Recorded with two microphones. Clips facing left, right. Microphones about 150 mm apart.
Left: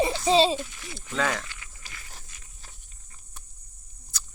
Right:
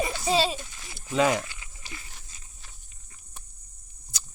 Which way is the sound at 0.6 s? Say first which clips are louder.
Left 4 dB; 35° right (ahead or behind).